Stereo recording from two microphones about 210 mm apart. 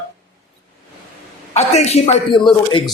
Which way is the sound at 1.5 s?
30° left (ahead or behind).